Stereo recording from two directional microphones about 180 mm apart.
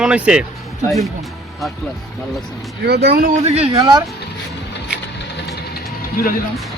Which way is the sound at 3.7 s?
25° right (ahead or behind).